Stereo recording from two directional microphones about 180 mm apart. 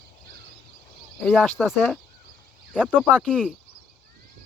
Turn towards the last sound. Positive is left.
turn(degrees=10)  # may be behind; listen again after turning